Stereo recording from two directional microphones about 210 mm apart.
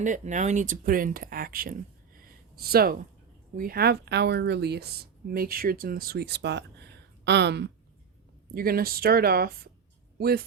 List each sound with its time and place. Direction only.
0.0 s speech: 35° right (ahead or behind)